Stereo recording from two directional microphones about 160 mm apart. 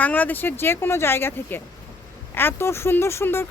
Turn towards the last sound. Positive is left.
turn(degrees=15)  # may be behind; listen again after turning